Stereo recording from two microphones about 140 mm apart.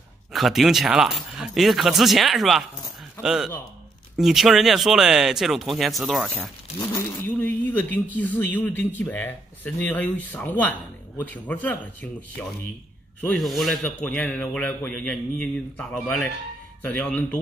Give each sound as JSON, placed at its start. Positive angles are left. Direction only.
{"t": 0.3, "sound": "a man's voice", "side_deg": 0}
{"t": 6.9, "sound": "a man's voice", "side_deg": 15}
{"t": 13.3, "sound": "speech", "side_deg": 0}
{"t": 13.8, "sound": "a man's voice", "side_deg": 10}